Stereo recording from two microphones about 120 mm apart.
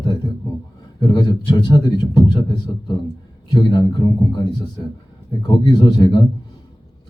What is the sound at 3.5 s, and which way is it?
Speech, 35° left (ahead or behind).